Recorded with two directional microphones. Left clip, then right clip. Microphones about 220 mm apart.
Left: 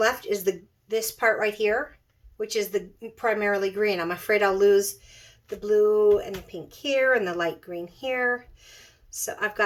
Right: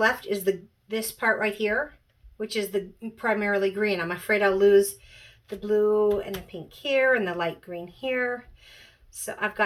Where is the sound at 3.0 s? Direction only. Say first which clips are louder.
Left 2 dB; 45° left (ahead or behind).